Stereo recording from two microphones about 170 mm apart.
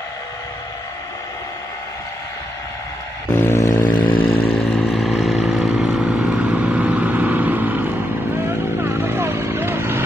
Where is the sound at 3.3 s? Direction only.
15° left (ahead or behind).